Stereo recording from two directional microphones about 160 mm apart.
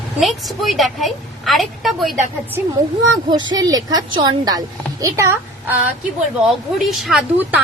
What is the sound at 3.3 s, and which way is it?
A woman's voice, 25° right (ahead or behind).